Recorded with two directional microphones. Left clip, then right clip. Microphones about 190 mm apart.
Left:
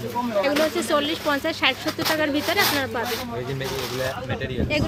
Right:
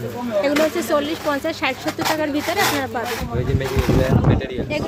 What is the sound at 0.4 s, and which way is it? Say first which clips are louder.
Speech: right 6 dB; 10° right (ahead or behind).